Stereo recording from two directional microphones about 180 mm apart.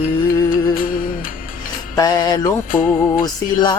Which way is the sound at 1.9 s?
20° left (ahead or behind).